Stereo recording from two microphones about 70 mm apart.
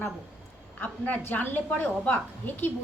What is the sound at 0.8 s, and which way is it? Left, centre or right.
A woman's voice, left.